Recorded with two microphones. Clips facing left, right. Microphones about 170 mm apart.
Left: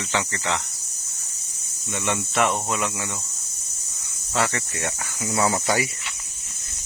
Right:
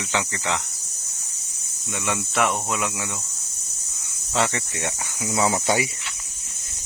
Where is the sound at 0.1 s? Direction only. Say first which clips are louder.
Even; 15° right (ahead or behind).